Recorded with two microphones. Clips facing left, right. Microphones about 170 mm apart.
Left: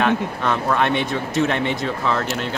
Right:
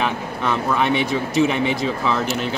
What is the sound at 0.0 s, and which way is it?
Speech, 5° right (ahead or behind).